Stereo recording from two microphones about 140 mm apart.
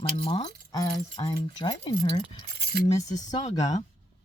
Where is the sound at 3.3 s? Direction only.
35° left (ahead or behind).